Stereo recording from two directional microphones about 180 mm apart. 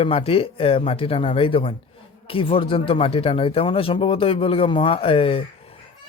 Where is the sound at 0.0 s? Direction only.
30° left (ahead or behind).